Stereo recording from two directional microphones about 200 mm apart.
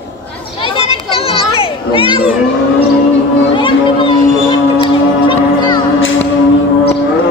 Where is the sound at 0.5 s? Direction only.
25° left (ahead or behind).